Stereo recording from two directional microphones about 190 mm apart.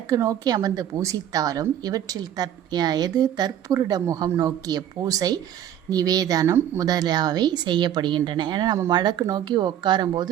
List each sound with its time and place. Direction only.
0.1 s a woman's voice: 20° right (ahead or behind)